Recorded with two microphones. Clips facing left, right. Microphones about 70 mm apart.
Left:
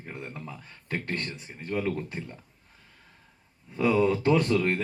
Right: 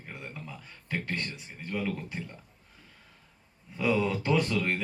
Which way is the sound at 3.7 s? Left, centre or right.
Centre.